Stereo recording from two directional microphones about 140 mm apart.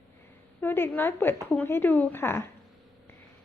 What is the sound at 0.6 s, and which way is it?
Speech, 15° left (ahead or behind).